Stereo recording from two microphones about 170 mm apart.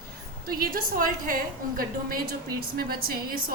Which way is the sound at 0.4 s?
60° right (ahead or behind).